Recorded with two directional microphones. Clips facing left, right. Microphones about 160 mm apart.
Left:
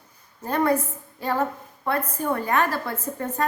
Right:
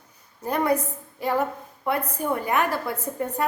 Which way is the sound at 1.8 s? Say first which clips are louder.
Even; 15° right (ahead or behind).